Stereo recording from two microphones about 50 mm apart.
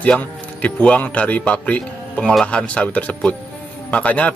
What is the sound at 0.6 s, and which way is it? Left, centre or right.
Speech, left.